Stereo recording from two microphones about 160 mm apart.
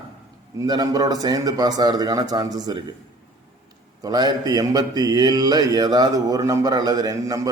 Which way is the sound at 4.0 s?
25° right (ahead or behind).